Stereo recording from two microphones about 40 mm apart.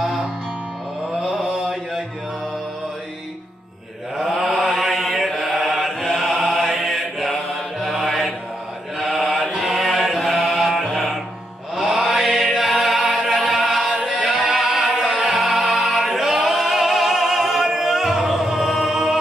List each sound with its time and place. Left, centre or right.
0.0 s music: centre
1.2 s mantra: centre
4.2 s mantra: centre
8.9 s chant: centre
13.1 s music: centre
13.9 s a capella: right
14.2 s music: centre